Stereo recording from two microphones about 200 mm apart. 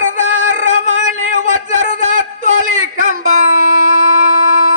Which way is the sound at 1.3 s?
40° right (ahead or behind).